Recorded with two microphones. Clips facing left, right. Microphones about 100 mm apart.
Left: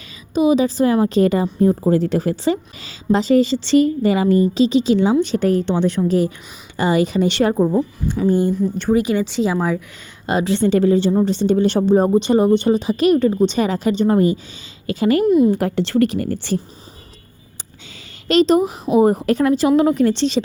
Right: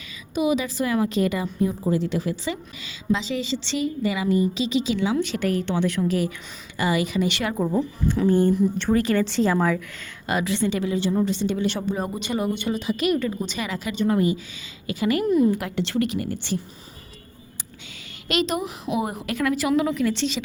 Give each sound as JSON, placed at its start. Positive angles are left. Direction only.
{"t": 0.3, "sound": "a woman's voice", "side_deg": 30}
{"t": 8.2, "sound": "speech", "side_deg": 10}
{"t": 10.2, "sound": "a woman's voice", "side_deg": 30}
{"t": 15.2, "sound": "a woman's voice", "side_deg": 20}
{"t": 15.5, "sound": "a woman's voice", "side_deg": 35}
{"t": 18.3, "sound": "a woman's voice", "side_deg": 35}